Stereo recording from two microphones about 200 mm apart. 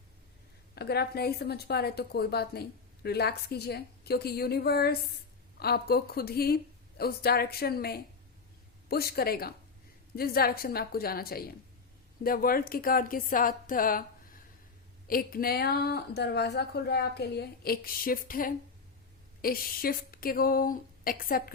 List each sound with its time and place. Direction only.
0.8 s a woman's voice: 55° left (ahead or behind)
15.0 s a woman's voice: 45° left (ahead or behind)